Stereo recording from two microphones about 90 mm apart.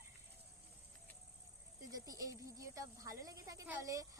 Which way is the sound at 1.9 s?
40° right (ahead or behind).